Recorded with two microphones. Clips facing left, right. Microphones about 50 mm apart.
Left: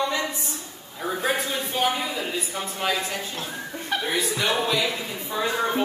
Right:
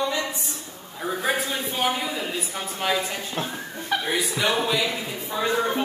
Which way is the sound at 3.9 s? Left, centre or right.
Centre.